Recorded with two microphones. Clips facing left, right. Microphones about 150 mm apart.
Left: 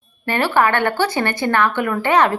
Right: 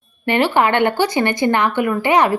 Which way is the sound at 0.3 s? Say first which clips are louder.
Right 2 dB; 15° right (ahead or behind).